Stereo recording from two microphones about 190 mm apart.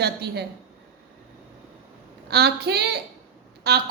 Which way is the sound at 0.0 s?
60° right (ahead or behind).